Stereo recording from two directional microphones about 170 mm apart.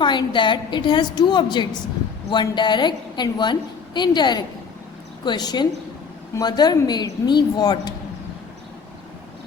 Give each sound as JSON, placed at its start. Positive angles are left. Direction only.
{"t": 0.0, "sound": "a woman's voice", "side_deg": 25}